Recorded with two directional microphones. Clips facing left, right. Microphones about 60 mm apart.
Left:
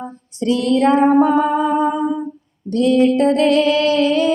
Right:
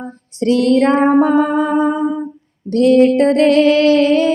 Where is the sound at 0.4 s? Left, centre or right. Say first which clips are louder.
Right 3 dB; right.